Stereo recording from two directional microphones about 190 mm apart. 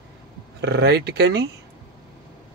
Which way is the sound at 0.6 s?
65° right (ahead or behind).